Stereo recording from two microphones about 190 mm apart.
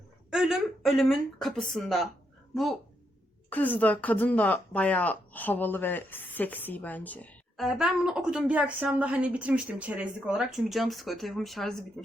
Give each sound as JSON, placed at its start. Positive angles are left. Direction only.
{"t": 0.3, "sound": "speech", "side_deg": 0}
{"t": 3.5, "sound": "speech", "side_deg": 10}